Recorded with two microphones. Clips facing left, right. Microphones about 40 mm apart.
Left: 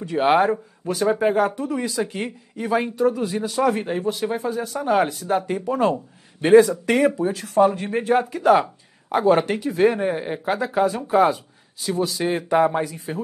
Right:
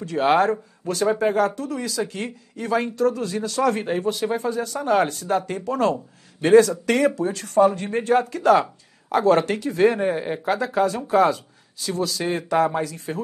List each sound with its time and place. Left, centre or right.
0.0 s speech: centre
1.5 s speech: left
3.8 s speech: centre